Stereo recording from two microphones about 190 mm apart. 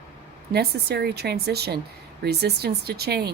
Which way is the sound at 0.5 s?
55° right (ahead or behind).